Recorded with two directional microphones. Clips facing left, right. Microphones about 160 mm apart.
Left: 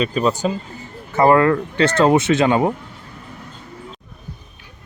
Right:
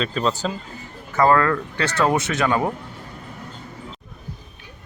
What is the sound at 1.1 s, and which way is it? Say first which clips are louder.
Speech: left 4 dB; 20° left (ahead or behind).